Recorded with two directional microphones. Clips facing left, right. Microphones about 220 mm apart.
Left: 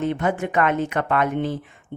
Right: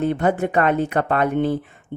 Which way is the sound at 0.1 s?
40° right (ahead or behind).